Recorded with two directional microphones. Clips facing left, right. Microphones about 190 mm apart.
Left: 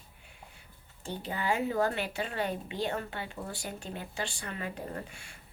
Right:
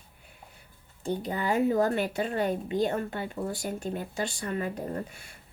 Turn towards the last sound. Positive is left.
turn(degrees=-35)  # may be behind; listen again after turning